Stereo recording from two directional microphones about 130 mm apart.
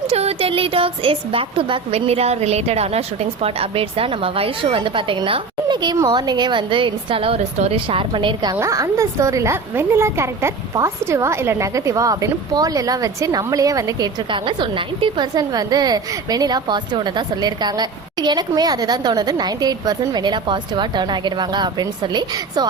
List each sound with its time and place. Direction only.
0.1 s a woman's voice: 50° right (ahead or behind); by 8.5 s 35° right (ahead or behind)
8.5 s a woman's voice: 25° right (ahead or behind)
14.3 s a woman's voice: 40° right (ahead or behind)